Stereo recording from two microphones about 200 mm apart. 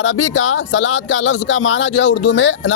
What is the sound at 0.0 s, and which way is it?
A man's voice, 75° left (ahead or behind).